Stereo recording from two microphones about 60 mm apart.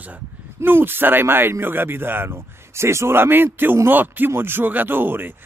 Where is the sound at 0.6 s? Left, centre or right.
Right.